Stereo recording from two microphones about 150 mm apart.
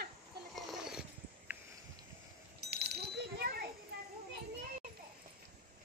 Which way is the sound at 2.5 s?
90° right.